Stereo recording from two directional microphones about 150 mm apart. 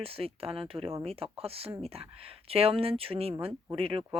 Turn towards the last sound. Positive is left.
turn(degrees=-40)  # may be behind; listen again after turning